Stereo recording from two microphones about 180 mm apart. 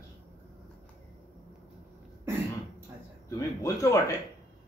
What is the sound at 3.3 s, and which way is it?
Speech, 20° left (ahead or behind).